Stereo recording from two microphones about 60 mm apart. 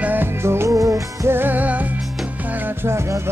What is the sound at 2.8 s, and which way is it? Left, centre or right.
Music, right.